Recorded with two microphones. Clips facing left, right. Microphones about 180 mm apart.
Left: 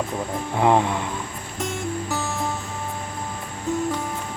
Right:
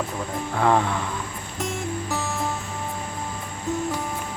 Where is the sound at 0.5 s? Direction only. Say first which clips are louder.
Left 2 dB; 20° left (ahead or behind).